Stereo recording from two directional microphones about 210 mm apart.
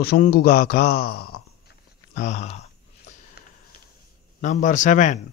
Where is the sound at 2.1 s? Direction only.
35° left (ahead or behind).